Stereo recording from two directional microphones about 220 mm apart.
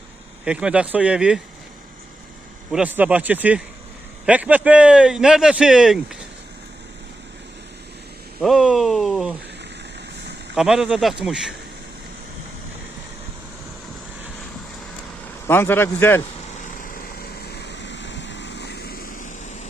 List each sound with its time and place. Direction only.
0.4 s a man's voice: 5° right (ahead or behind)
2.7 s a man's voice: 5° right (ahead or behind)
8.4 s speech: centre (ahead or behind)
10.5 s a man's voice: 5° right (ahead or behind)
15.4 s a man's voice: 10° left (ahead or behind)
16.6 s vehicle: 40° left (ahead or behind)